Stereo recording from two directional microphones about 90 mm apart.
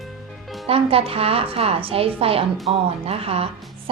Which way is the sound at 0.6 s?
90° right.